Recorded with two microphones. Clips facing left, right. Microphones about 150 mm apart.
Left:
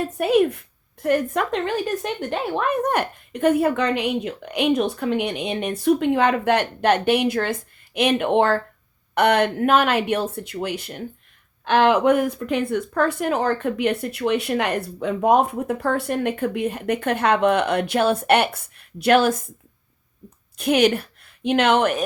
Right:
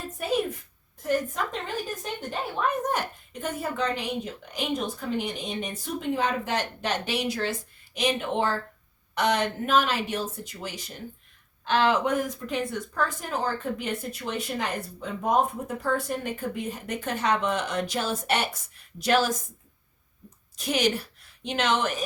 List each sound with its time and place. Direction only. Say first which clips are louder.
0.0 s a woman's voice: left 9 dB; 70° left (ahead or behind)
20.6 s a woman's voice: left 8 dB; 60° left (ahead or behind)